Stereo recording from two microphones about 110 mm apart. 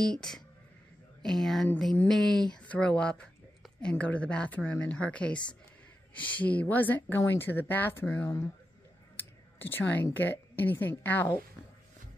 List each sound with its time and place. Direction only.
0.0 s speech: 5° left (ahead or behind)